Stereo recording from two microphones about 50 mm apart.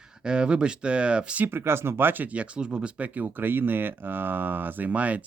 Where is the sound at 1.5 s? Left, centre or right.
Right.